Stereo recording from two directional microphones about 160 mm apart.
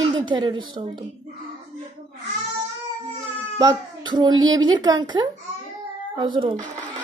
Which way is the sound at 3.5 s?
25° right (ahead or behind).